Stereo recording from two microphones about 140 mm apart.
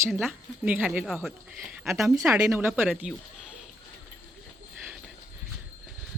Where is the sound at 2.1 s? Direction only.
20° right (ahead or behind).